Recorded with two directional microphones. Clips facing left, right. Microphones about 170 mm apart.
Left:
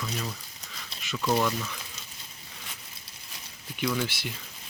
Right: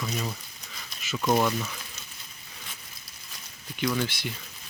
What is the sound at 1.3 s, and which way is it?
Speech, 25° right (ahead or behind).